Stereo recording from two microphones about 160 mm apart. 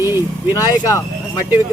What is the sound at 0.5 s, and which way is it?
Speech, 20° left (ahead or behind).